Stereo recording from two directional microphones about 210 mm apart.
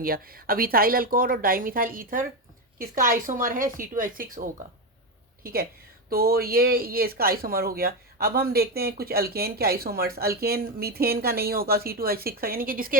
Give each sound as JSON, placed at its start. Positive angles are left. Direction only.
{"t": 0.0, "sound": "speech", "side_deg": -45}